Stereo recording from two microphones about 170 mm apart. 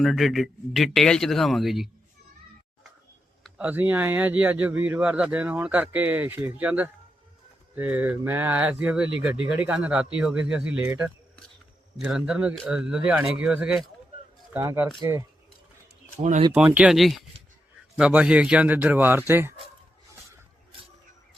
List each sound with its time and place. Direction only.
0.0 s speech: centre (ahead or behind)
3.6 s speech: 10° right (ahead or behind)
16.5 s speech: 10° right (ahead or behind)